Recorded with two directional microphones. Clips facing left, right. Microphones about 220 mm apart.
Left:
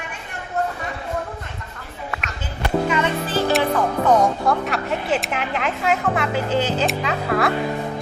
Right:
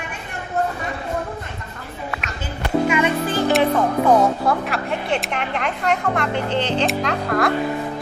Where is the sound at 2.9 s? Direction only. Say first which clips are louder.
Right 2 dB; 10° right (ahead or behind).